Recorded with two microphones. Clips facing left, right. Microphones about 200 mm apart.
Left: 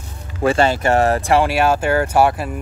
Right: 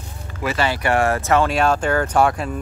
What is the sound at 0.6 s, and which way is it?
Speech, 45° left (ahead or behind).